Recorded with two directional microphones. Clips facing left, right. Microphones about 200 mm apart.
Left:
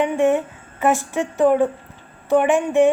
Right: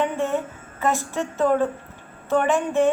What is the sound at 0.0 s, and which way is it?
A woman's voice, 15° left (ahead or behind).